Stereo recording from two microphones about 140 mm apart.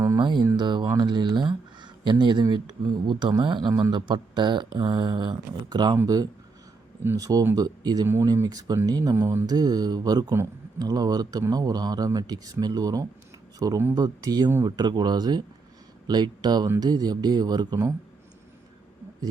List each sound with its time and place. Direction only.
0.2 s speech: 35° right (ahead or behind)
7.0 s speech: 20° right (ahead or behind)
8.0 s speech: 15° right (ahead or behind)
8.3 s speech: 25° right (ahead or behind)